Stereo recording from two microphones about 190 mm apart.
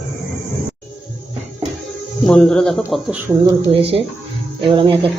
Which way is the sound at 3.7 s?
30° right (ahead or behind).